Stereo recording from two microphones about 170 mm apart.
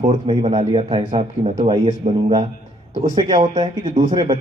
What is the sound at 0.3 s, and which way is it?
A man's voice, 25° right (ahead or behind).